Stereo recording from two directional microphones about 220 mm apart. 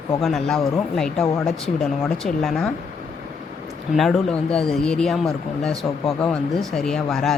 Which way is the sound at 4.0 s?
Centre (ahead or behind).